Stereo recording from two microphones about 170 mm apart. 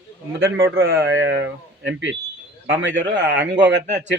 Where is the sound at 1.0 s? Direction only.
90° right.